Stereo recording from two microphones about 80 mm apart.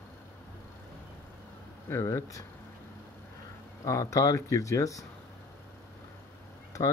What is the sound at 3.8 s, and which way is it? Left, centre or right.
Speech, left.